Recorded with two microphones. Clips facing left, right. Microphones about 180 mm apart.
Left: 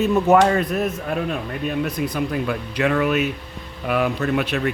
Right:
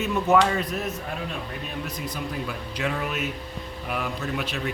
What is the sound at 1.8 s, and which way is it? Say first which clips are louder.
Speech: left 8 dB; 65° left (ahead or behind).